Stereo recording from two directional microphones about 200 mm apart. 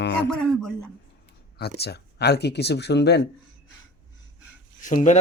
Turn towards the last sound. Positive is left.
turn(degrees=40)  # may be behind; listen again after turning